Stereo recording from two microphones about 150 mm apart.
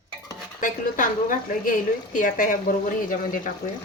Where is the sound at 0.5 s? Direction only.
65° left (ahead or behind).